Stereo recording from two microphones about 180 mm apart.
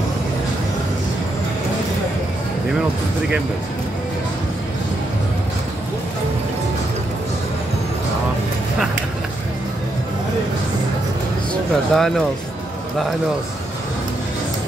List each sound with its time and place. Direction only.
11.7 s speech: centre (ahead or behind)